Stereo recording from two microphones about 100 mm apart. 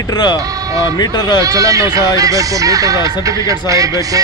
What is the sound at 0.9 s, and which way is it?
Speech, 45° left (ahead or behind).